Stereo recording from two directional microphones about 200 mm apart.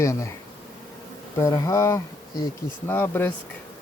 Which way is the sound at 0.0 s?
15° left (ahead or behind).